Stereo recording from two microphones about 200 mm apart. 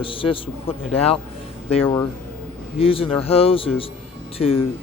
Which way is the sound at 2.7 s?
30° left (ahead or behind).